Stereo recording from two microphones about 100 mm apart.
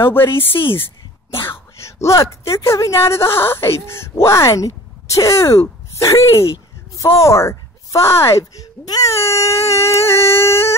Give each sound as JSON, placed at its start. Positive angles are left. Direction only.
{"t": 0.1, "sound": "speech", "side_deg": 20}